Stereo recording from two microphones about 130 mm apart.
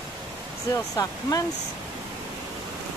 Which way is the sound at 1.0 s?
30° left (ahead or behind).